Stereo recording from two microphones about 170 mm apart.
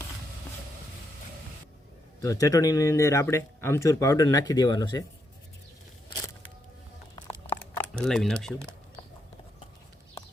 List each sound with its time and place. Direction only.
2.2 s speech: 20° left (ahead or behind)
7.6 s speech: 5° left (ahead or behind)